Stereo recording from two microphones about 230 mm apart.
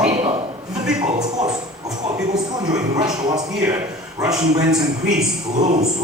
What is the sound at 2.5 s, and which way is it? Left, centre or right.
A man's voice, centre.